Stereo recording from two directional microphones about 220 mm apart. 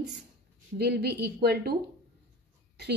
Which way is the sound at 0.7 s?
50° right (ahead or behind).